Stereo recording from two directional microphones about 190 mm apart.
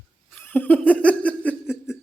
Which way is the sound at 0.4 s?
10° left (ahead or behind).